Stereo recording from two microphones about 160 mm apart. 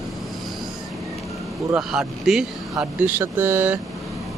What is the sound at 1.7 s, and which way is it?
Speech, centre (ahead or behind).